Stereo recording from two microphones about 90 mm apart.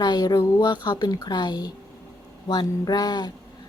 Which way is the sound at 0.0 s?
50° left (ahead or behind).